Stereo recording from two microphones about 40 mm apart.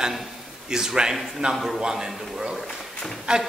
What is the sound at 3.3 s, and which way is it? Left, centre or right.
Speech, centre.